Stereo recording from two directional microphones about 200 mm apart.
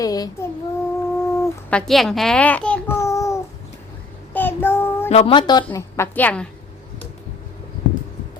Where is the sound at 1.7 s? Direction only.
5° left (ahead or behind).